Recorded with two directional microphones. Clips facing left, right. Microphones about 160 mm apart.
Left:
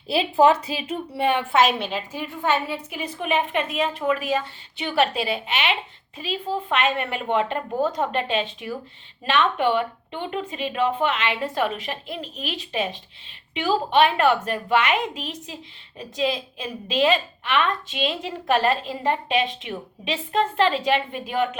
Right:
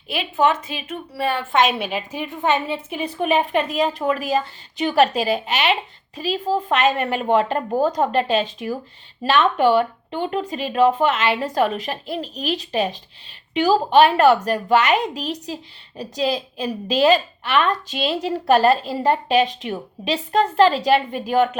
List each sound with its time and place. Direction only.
0.1 s a woman's voice: 30° left (ahead or behind)
1.8 s a woman's voice: 15° right (ahead or behind); by 21.6 s 40° right (ahead or behind)